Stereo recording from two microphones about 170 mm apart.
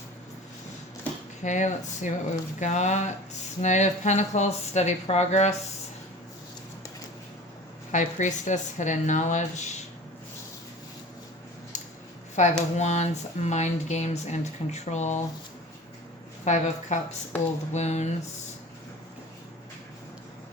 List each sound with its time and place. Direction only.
1.4 s speech: 45° left (ahead or behind)
7.9 s speech: 45° left (ahead or behind)
11.7 s a sound: 45° left (ahead or behind)
12.4 s speech: 40° left (ahead or behind)
16.4 s speech: 40° left (ahead or behind)